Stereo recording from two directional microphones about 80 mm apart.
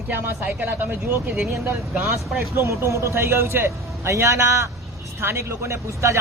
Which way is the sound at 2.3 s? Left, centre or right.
Right.